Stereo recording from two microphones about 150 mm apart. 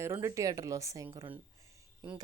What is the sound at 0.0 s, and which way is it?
Speech, 20° right (ahead or behind).